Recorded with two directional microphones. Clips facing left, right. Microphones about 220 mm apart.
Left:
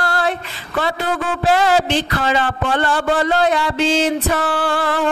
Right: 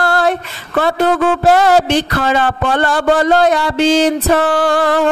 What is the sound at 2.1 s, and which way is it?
A man's voice, 50° right (ahead or behind).